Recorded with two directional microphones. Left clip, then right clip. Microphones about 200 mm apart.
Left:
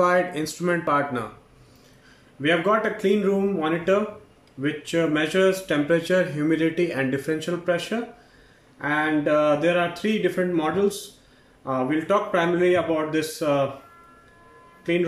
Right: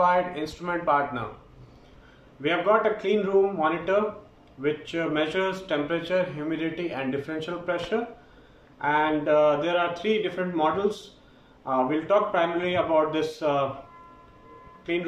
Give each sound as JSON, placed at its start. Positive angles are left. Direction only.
{"t": 0.0, "sound": "speech", "side_deg": 55}
{"t": 2.4, "sound": "speech", "side_deg": 50}
{"t": 8.8, "sound": "speech", "side_deg": 50}